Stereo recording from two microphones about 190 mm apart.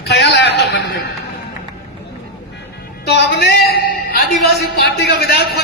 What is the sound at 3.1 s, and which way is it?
A man's voice, 60° left (ahead or behind).